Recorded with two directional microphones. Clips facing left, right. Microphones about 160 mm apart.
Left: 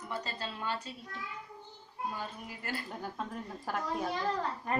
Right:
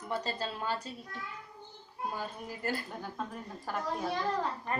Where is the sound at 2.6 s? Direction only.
40° right (ahead or behind).